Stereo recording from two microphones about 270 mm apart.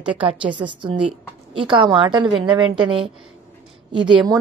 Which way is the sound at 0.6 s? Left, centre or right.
Centre.